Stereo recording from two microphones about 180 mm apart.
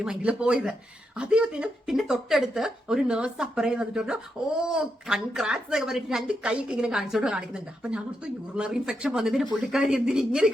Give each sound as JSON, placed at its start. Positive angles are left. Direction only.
{"t": 0.0, "sound": "a woman's voice", "side_deg": -5}